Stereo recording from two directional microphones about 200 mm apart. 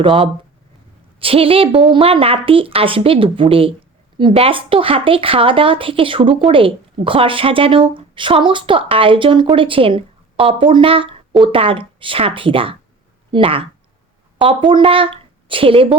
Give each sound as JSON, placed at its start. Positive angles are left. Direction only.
{"t": 0.0, "sound": "a woman's voice", "side_deg": -25}